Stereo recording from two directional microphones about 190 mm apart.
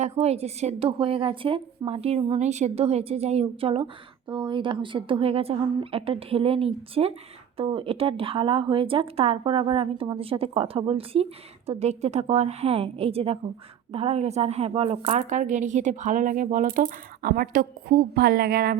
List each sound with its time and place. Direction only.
0.0 s a woman's voice: 35° right (ahead or behind); by 18.8 s 50° right (ahead or behind)